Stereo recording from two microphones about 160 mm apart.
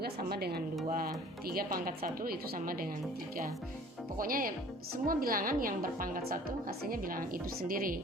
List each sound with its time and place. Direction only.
0.0 s a woman's voice: 80° right
0.9 s a woman's voice: 65° right (ahead or behind)
4.2 s a woman's voice: 60° right (ahead or behind)